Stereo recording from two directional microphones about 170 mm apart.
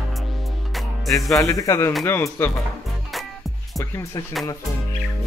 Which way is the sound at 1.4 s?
20° left (ahead or behind).